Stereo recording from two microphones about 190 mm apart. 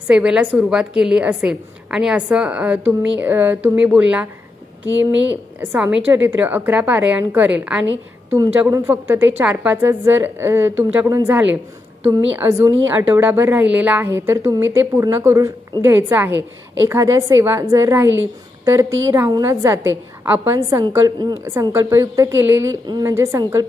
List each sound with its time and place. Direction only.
0.1 s a woman's voice: 5° right (ahead or behind)
5.3 s a woman's voice: 10° right (ahead or behind)